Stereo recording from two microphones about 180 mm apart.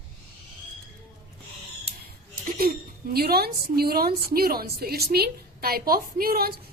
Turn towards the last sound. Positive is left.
turn(degrees=-60)  # may be behind; listen again after turning